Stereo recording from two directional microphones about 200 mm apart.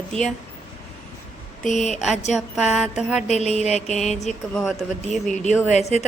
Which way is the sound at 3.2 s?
35° left (ahead or behind).